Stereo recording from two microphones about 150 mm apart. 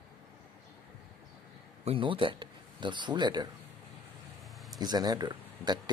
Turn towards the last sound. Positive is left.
turn(degrees=-30)  # may be behind; listen again after turning